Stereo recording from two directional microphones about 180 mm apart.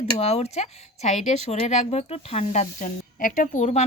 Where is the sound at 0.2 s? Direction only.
35° left (ahead or behind).